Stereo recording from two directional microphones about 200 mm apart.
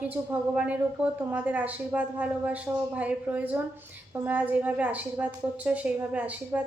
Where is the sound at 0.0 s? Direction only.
5° right (ahead or behind).